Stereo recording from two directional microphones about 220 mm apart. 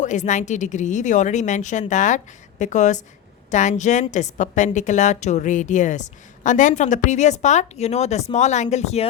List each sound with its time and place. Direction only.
0.0 s a woman's voice: 35° left (ahead or behind)